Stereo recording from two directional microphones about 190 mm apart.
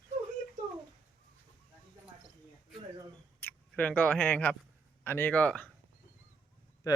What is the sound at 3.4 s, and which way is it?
A man's voice, 10° left (ahead or behind).